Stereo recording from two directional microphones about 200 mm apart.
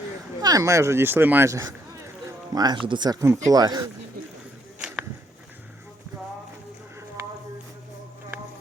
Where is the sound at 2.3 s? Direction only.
20° right (ahead or behind).